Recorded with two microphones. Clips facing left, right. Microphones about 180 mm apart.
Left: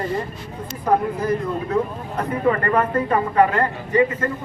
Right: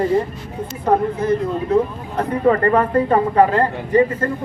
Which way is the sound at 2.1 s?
35° right (ahead or behind).